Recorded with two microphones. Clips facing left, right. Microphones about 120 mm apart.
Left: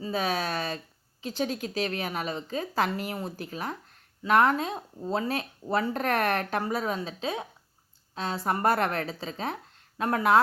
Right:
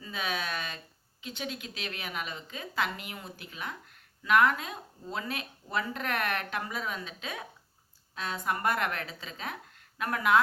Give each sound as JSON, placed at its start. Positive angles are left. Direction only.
{"t": 0.0, "sound": "speech", "side_deg": 35}